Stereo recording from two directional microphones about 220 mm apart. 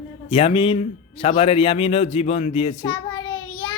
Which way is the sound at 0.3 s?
25° left (ahead or behind).